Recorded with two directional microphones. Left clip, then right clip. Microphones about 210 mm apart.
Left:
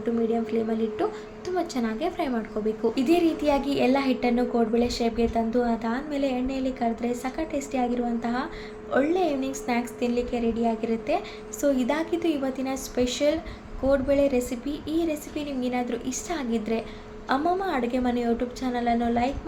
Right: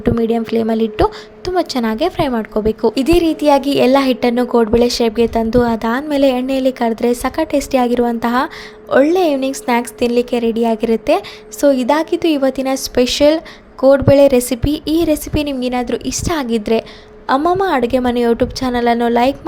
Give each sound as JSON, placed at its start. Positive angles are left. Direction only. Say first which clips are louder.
{"t": 0.0, "sound": "a woman's voice", "louder": "right 10 dB", "side_deg": -50}